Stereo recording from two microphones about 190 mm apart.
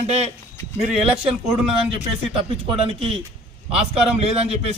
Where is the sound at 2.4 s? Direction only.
30° right (ahead or behind).